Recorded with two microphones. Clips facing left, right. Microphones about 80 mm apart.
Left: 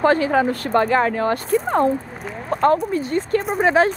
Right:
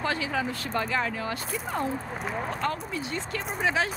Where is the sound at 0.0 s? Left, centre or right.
Left.